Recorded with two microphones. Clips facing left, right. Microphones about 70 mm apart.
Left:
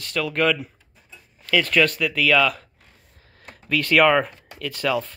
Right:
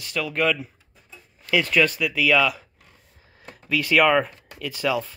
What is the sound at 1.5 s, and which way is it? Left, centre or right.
Speech, centre.